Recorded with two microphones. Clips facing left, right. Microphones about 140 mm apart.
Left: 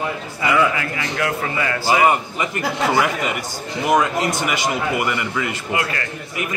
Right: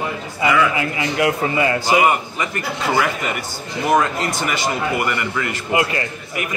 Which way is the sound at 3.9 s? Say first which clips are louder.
Even; 15° left (ahead or behind).